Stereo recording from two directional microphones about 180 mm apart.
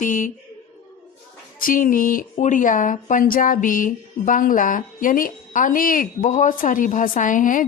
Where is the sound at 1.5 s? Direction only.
50° left (ahead or behind).